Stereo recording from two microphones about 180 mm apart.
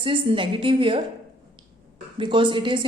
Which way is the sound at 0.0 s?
30° right (ahead or behind).